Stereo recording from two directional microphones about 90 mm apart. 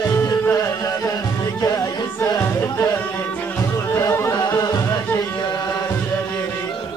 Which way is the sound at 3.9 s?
30° left (ahead or behind).